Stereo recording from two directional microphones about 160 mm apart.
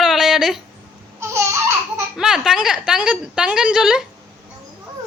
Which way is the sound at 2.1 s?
5° right (ahead or behind).